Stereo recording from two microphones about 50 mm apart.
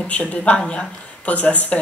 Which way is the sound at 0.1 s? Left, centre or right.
Left.